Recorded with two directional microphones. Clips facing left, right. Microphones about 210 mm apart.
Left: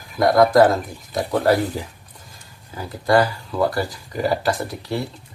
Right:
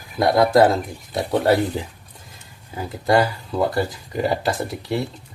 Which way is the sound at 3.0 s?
25° right (ahead or behind).